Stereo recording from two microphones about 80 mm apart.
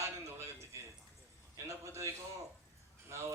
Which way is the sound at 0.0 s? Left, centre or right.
Right.